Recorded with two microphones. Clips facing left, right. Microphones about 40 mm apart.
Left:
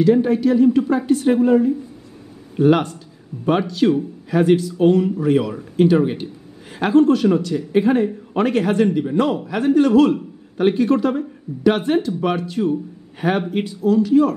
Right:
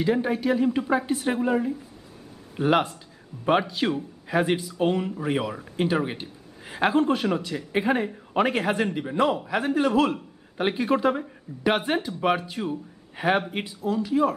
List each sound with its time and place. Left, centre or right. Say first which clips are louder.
0.0 s speech: left 8 dB; centre